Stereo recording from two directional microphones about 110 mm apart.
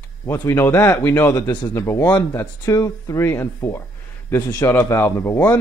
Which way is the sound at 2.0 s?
15° left (ahead or behind).